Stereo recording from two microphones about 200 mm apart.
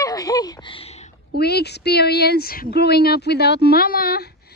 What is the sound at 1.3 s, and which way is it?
Speech, 55° left (ahead or behind).